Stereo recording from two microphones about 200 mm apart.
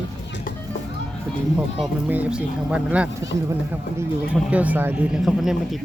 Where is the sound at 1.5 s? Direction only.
10° right (ahead or behind).